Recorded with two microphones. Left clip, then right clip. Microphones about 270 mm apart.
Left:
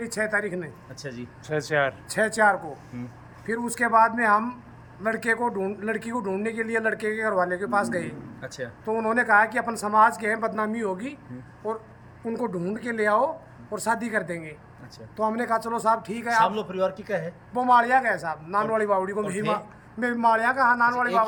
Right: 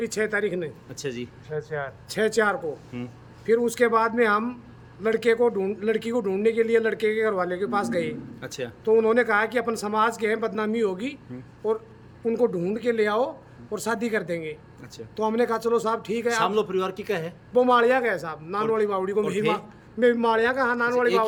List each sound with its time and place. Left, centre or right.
0.1 s speech: centre
12.2 s speech: centre